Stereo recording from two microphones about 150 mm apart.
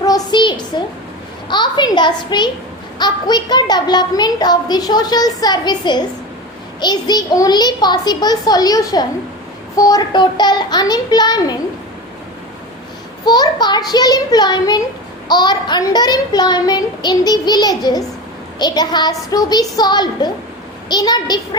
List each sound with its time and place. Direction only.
0.0 s a sound: 25° left (ahead or behind)
1.5 s a child's voice: 30° left (ahead or behind)
13.2 s a child's voice: 30° left (ahead or behind)